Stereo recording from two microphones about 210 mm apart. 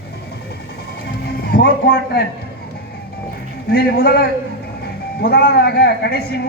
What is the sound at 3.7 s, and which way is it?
A man's voice, 45° left (ahead or behind).